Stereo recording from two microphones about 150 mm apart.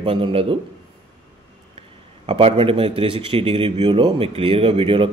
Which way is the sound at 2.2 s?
40° right (ahead or behind).